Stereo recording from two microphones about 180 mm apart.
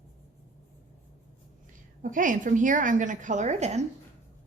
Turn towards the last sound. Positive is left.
turn(degrees=-40)  # may be behind; listen again after turning